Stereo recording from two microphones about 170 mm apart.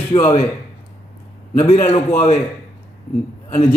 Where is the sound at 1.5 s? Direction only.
35° left (ahead or behind).